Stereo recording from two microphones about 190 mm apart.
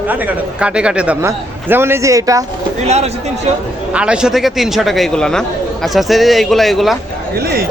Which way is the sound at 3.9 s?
5° right (ahead or behind).